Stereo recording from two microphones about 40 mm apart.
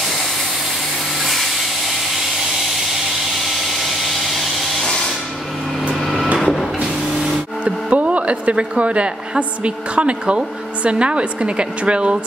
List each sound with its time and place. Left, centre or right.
5.9 s vehicle: centre
6.4 s printer: centre
7.6 s speech: right